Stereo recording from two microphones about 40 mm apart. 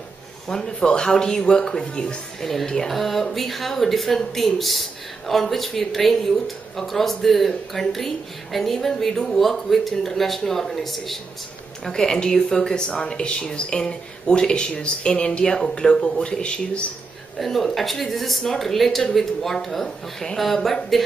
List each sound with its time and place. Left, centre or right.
0.5 s speech: centre
2.9 s a woman's voice: centre
11.8 s speech: centre
17.4 s a woman's voice: centre